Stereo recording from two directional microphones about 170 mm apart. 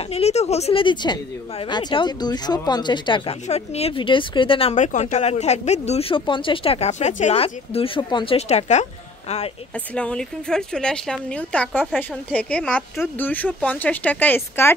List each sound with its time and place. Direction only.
0.1 s a woman's voice: 40° left (ahead or behind)
3.4 s speech: 40° left (ahead or behind)
9.9 s a woman's voice: 5° left (ahead or behind)